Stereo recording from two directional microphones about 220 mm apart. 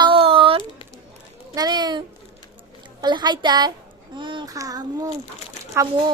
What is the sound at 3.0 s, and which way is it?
A child's voice, 20° right (ahead or behind).